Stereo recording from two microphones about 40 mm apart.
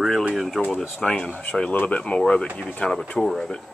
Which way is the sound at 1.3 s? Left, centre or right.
Left.